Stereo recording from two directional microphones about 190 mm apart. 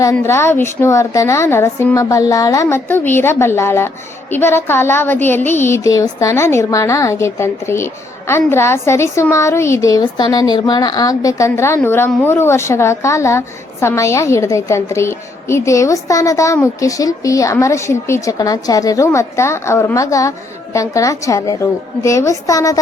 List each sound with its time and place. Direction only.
0.0 s a woman's voice: 15° left (ahead or behind)